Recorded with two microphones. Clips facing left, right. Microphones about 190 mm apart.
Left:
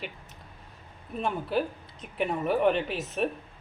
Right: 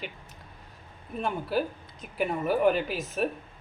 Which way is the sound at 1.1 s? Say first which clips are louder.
Even; centre (ahead or behind).